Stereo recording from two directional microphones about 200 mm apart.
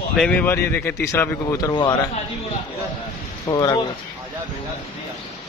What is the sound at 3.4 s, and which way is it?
Speech, 20° left (ahead or behind).